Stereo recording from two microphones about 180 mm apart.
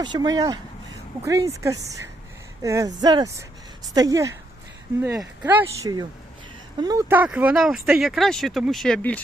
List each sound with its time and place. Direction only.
0.0 s speech: 25° right (ahead or behind); by 9.2 s 10° left (ahead or behind)